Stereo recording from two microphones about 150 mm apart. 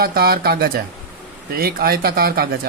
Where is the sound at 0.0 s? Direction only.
90° right.